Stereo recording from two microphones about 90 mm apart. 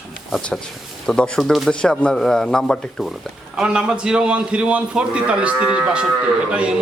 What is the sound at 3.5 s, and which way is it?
A man's voice, 10° right (ahead or behind).